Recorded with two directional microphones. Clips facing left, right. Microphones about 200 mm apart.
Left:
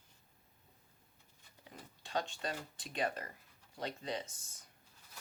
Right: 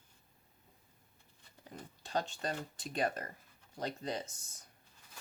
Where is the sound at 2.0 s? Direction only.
40° right (ahead or behind).